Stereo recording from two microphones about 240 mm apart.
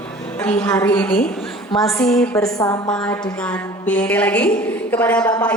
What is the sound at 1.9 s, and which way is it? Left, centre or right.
Speech, centre.